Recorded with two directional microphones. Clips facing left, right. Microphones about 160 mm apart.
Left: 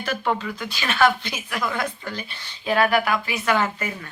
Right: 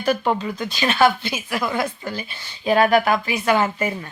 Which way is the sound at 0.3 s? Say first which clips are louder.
Right 3 dB; 25° right (ahead or behind).